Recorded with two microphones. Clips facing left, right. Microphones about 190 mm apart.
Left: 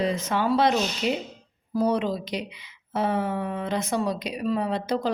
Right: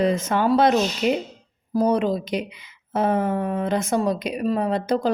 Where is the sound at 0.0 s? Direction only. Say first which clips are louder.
Right 4 dB; 50° right (ahead or behind).